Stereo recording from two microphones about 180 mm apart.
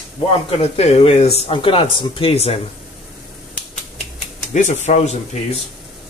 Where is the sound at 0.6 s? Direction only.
35° left (ahead or behind).